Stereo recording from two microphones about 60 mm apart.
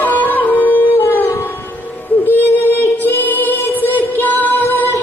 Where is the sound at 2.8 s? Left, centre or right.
Left.